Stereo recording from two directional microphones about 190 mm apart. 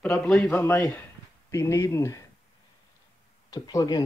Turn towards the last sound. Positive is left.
turn(degrees=20)  # may be behind; listen again after turning